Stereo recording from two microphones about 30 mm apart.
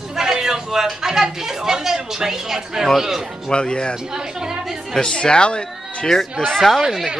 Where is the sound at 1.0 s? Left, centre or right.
Centre.